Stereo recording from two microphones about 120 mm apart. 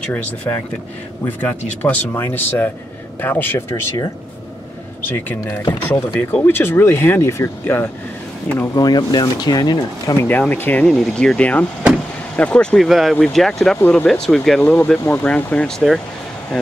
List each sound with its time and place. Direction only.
0.5 s speech: 20° left (ahead or behind)
5.0 s speech: 15° left (ahead or behind)
8.7 s speech: 35° left (ahead or behind)
10.1 s speech: 15° left (ahead or behind)
14.6 s speech: 15° left (ahead or behind)